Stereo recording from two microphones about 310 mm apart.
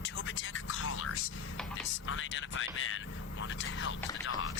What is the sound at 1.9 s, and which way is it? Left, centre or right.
Speech, left.